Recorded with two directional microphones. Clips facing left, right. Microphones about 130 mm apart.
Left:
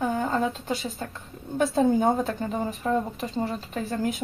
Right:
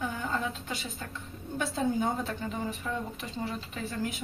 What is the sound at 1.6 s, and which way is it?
Speech, 50° left (ahead or behind).